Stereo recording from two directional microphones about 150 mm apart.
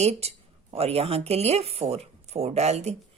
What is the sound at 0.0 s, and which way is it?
A woman's voice, 45° right (ahead or behind).